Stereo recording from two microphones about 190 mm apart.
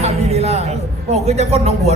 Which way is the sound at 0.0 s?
35° right (ahead or behind).